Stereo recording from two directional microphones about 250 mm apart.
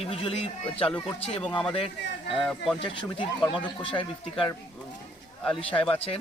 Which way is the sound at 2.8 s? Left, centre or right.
Centre.